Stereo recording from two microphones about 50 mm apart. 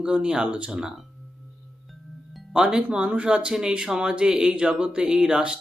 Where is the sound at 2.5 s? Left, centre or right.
Centre.